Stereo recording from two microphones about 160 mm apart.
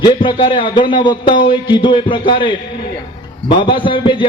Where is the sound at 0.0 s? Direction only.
30° left (ahead or behind).